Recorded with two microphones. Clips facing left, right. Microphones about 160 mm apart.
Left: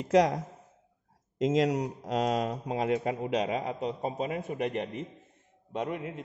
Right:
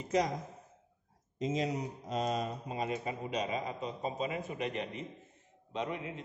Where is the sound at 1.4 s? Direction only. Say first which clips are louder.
Left 8 dB; 90° left.